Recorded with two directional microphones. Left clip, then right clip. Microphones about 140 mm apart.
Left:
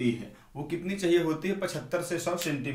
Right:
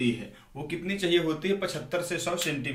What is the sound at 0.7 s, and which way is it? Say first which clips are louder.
Speech: even; 45° left (ahead or behind).